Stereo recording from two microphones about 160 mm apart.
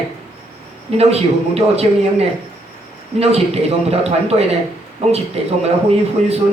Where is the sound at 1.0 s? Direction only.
40° right (ahead or behind).